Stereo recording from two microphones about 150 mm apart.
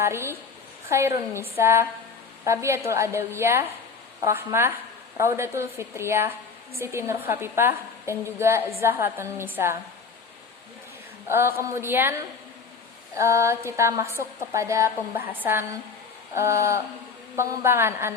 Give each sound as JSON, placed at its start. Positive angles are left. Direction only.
{"t": 0.0, "sound": "a woman's voice", "side_deg": -15}
{"t": 11.3, "sound": "a woman's voice", "side_deg": -15}